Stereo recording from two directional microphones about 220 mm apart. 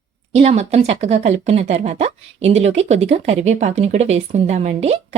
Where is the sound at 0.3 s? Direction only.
30° right (ahead or behind).